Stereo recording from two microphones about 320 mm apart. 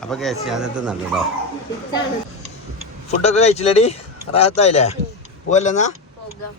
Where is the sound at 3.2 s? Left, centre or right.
Centre.